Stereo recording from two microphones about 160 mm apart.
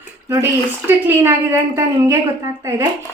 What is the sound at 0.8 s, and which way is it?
A woman's voice, 15° right (ahead or behind).